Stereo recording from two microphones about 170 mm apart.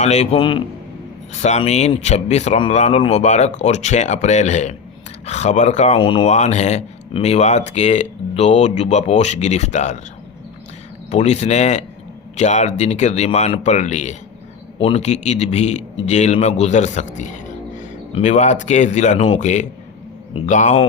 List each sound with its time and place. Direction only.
0.0 s speech: 40° left (ahead or behind)
1.3 s speech: 45° left (ahead or behind)
6.0 s speech: 30° left (ahead or behind)
11.1 s a man's voice: 40° left (ahead or behind)